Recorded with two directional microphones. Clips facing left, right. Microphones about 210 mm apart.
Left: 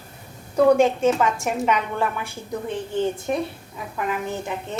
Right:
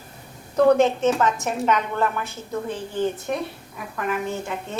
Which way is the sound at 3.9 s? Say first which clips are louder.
Right 1 dB; 20° left (ahead or behind).